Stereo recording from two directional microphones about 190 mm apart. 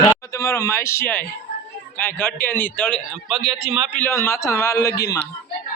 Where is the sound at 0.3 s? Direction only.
15° left (ahead or behind).